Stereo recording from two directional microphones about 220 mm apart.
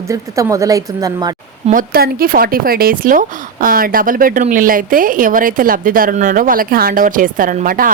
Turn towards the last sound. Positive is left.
turn(degrees=-40)  # may be behind; listen again after turning